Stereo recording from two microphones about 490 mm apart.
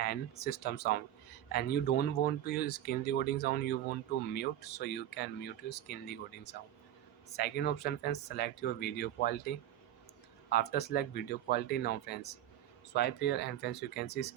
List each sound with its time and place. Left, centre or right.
0.0 s speech: centre
10.5 s speech: centre